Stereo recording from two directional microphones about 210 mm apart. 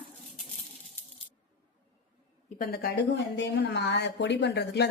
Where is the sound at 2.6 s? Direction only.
50° left (ahead or behind).